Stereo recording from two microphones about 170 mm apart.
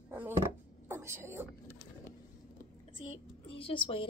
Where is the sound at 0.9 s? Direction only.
15° right (ahead or behind).